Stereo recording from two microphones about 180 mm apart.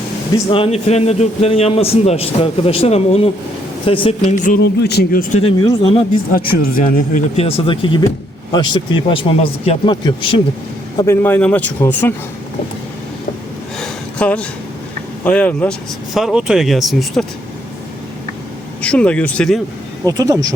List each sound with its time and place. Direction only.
0.5 s a man's voice: 30° left (ahead or behind)
4.2 s speech: 45° left (ahead or behind)
4.6 s speech: 65° left (ahead or behind)
5.3 s a man's voice: 35° left (ahead or behind)
6.3 s a man's voice: 50° left (ahead or behind); by 10.4 s 30° left (ahead or behind)
10.9 s a man's voice: 15° left (ahead or behind)
13.7 s a sound: 5° left (ahead or behind)
15.2 s a man's voice: 5° left (ahead or behind)
18.8 s a man's voice: 5° left (ahead or behind)
20.1 s speech: 20° right (ahead or behind)